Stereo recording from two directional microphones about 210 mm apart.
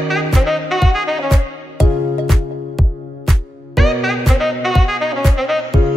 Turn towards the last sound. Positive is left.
turn(degrees=0)  # may be behind; listen again after turning